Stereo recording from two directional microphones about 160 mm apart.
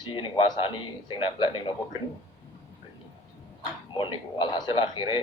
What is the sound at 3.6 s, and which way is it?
A man's voice, 30° left (ahead or behind).